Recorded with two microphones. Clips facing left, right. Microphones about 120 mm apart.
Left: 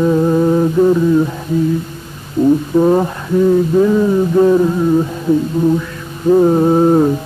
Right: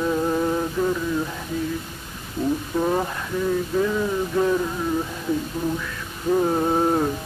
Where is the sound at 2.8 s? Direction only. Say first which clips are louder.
Left 10 dB; 30° left (ahead or behind).